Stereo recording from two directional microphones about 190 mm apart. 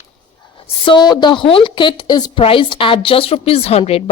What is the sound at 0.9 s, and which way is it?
A woman's voice, 25° left (ahead or behind).